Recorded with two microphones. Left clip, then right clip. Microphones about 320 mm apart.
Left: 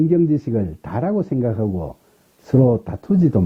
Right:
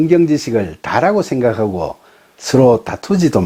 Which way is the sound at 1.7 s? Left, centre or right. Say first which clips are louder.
Right 8 dB; right.